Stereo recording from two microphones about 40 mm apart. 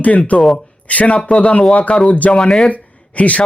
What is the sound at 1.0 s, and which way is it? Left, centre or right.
Speech, left.